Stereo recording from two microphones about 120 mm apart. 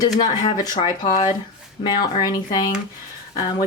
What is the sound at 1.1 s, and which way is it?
Speech, 35° left (ahead or behind).